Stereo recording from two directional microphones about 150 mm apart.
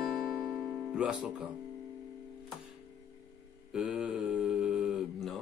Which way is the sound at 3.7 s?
5° right (ahead or behind).